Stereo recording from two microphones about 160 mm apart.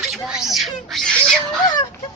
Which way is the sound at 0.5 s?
Centre (ahead or behind).